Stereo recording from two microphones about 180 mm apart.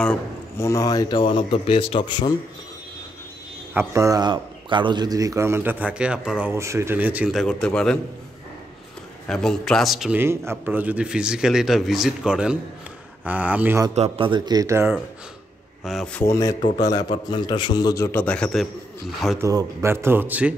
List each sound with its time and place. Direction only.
0.0 s speech: 10° left (ahead or behind)
3.7 s a man's voice: 15° right (ahead or behind)
6.5 s a man's voice: 15° right (ahead or behind); by 8.0 s 5° left (ahead or behind)
9.3 s a man's voice: 5° left (ahead or behind)
10.2 s a man's voice: 15° right (ahead or behind)
13.9 s speech: 35° right (ahead or behind); by 15.0 s 15° right (ahead or behind)
15.8 s speech: centre (ahead or behind)
19.4 s a man's voice: 15° right (ahead or behind)